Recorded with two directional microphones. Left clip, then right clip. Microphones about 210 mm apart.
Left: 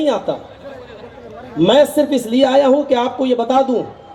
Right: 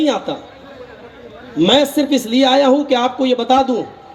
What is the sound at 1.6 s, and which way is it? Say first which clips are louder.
A woman's voice: left 2 dB; 40° right (ahead or behind).